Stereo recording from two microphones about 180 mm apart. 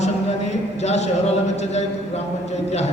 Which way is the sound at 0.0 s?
40° left (ahead or behind).